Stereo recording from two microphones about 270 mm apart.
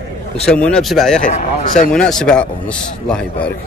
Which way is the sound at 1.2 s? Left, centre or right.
Left.